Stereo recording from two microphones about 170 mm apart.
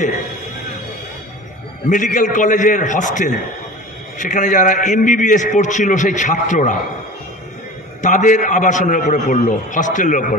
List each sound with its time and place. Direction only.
1.9 s a man's voice: 50° left (ahead or behind)
8.0 s a man's voice: 45° left (ahead or behind)